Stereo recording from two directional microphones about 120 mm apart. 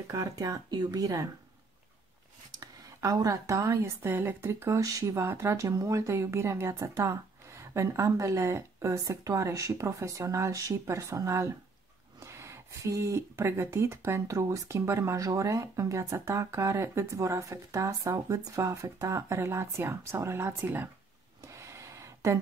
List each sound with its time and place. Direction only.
0.1 s speech: 30° right (ahead or behind)
2.6 s speech: 30° right (ahead or behind)
21.5 s a sound: 25° right (ahead or behind)